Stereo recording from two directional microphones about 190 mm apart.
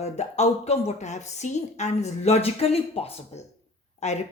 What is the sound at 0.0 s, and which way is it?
A woman's voice, 35° left (ahead or behind).